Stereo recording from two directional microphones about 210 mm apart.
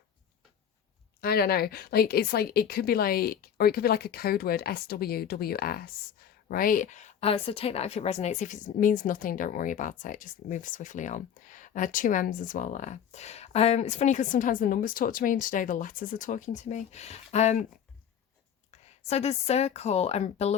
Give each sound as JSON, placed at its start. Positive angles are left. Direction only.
{"t": 1.2, "sound": "a woman's voice", "side_deg": 45}
{"t": 18.7, "sound": "a woman's voice", "side_deg": 30}